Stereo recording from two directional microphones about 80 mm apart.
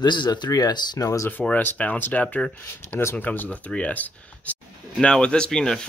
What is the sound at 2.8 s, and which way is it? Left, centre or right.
Speech, left.